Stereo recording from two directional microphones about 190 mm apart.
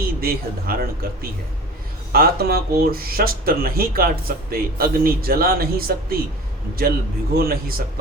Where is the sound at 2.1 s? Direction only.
55° right (ahead or behind).